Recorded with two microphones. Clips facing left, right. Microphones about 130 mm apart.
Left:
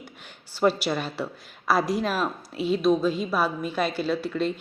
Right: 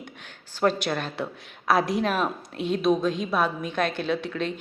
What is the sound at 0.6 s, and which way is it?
A woman's voice, 5° left (ahead or behind).